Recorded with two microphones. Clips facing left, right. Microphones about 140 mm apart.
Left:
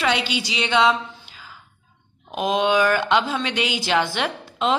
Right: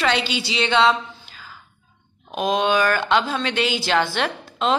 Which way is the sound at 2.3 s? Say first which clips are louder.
Even; 15° left (ahead or behind).